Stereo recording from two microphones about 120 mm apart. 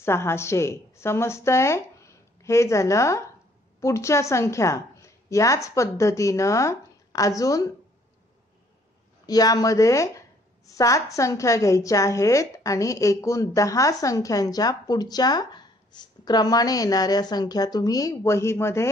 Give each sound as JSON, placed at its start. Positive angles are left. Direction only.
{"t": 0.0, "sound": "a woman's voice", "side_deg": 20}
{"t": 9.2, "sound": "a woman's voice", "side_deg": 30}